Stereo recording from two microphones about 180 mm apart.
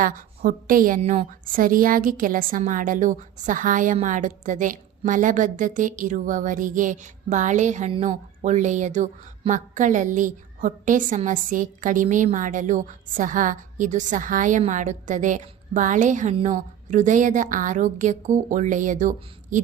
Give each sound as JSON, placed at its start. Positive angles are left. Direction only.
{"t": 0.0, "sound": "a woman's voice", "side_deg": -50}